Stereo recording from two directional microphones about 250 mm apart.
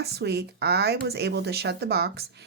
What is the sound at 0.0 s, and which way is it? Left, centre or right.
Speech, right.